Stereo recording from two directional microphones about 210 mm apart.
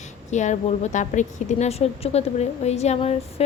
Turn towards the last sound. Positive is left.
turn(degrees=30)  # may be behind; listen again after turning